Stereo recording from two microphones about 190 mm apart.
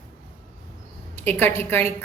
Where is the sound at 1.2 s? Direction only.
10° left (ahead or behind).